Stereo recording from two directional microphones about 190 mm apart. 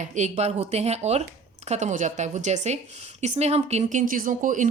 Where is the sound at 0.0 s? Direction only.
40° right (ahead or behind).